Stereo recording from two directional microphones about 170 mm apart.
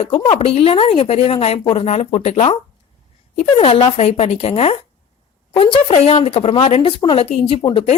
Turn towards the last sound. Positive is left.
turn(degrees=30)  # may be behind; listen again after turning